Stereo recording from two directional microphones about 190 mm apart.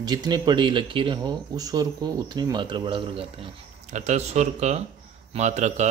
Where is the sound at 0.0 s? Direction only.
20° right (ahead or behind).